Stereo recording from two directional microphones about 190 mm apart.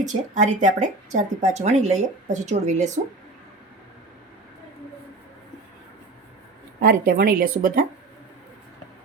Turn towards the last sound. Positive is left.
turn(degrees=-45)  # may be behind; listen again after turning